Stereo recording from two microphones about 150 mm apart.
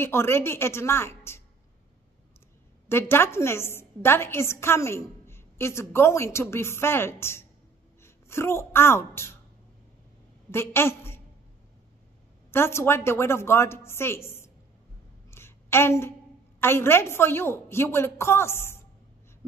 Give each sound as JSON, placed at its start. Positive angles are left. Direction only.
{"t": 0.0, "sound": "a woman's voice", "side_deg": 15}
{"t": 2.9, "sound": "a woman's voice", "side_deg": 15}
{"t": 10.5, "sound": "a woman's voice", "side_deg": 15}
{"t": 12.4, "sound": "a woman's voice", "side_deg": 15}
{"t": 15.3, "sound": "a sound", "side_deg": 15}
{"t": 16.5, "sound": "a woman's voice", "side_deg": 15}